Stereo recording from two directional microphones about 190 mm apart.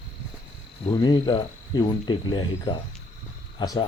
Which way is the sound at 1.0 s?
25° left (ahead or behind).